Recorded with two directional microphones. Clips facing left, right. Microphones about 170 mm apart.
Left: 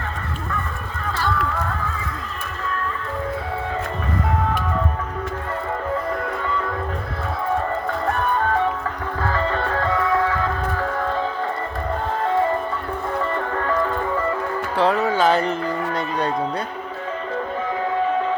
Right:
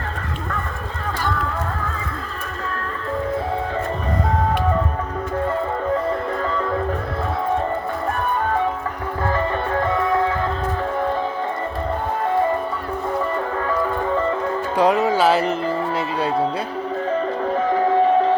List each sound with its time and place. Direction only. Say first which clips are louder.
9.2 s music: right 1 dB; 20° right (ahead or behind)
13.1 s music: even; 10° right (ahead or behind)
14.8 s music: right 2 dB; 15° right (ahead or behind)
15.2 s speech: right 1 dB; 5° right (ahead or behind)
15.9 s music: right 1 dB; 5° right (ahead or behind)